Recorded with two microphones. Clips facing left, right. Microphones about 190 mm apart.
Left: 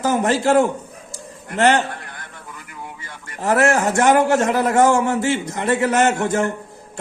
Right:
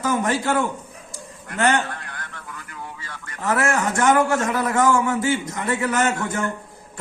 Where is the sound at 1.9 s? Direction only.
15° left (ahead or behind).